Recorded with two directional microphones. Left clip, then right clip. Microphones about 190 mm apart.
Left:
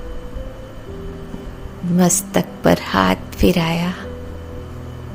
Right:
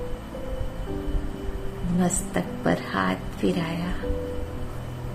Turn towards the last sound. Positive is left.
turn(degrees=55)  # may be behind; listen again after turning